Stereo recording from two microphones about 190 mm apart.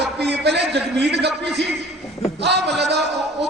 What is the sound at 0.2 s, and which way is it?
A man's voice, 60° right (ahead or behind).